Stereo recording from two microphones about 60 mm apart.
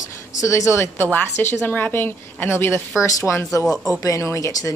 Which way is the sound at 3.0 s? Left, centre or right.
Left.